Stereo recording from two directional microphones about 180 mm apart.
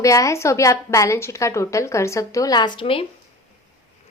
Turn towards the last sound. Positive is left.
turn(degrees=30)  # may be behind; listen again after turning